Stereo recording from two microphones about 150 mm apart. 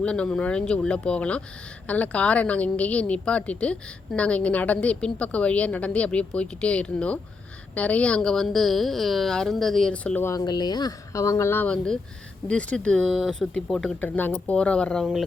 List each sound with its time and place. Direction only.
0.0 s a woman's voice: 5° left (ahead or behind)
10.4 s speech: 25° left (ahead or behind); by 15.2 s centre (ahead or behind)